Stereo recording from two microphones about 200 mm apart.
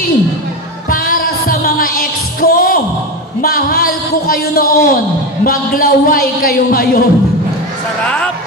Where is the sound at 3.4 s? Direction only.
45° left (ahead or behind).